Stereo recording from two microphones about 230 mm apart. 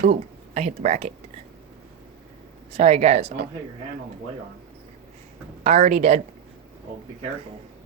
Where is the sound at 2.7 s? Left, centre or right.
Right.